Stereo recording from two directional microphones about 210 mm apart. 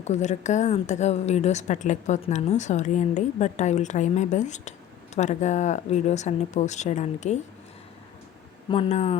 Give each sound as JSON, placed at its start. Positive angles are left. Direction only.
{"t": 0.0, "sound": "a woman's voice", "side_deg": 35}
{"t": 8.7, "sound": "speech", "side_deg": 30}